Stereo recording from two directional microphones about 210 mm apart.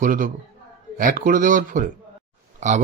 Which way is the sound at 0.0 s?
40° right (ahead or behind).